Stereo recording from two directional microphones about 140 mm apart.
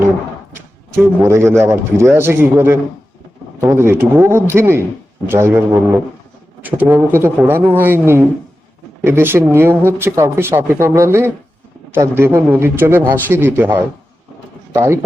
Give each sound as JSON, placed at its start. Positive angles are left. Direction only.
{"t": 1.2, "sound": "speech", "side_deg": -20}
{"t": 14.7, "sound": "a man's voice", "side_deg": -20}